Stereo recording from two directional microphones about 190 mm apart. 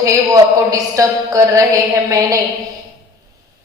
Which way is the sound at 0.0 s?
15° right (ahead or behind).